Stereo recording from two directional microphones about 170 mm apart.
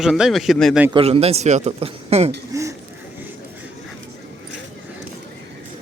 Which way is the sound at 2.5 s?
20° right (ahead or behind).